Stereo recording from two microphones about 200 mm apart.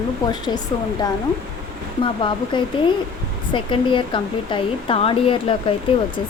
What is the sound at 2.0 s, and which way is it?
Speech, 25° left (ahead or behind).